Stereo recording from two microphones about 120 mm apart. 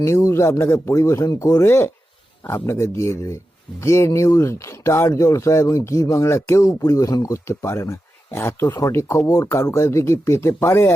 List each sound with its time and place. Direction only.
0.0 s speech: 25° left (ahead or behind)